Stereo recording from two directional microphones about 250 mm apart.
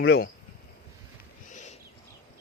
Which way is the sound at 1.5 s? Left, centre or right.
Left.